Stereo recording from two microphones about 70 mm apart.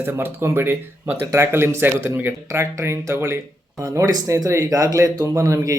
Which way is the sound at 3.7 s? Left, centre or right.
Right.